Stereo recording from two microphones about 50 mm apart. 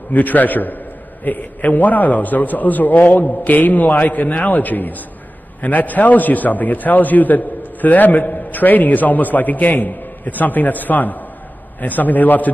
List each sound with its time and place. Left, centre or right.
0.1 s a man's voice: left